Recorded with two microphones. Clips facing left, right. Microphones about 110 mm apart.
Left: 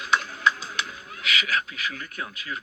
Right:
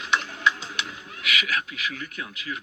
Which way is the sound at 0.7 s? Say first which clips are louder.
Left 1 dB; 35° left (ahead or behind).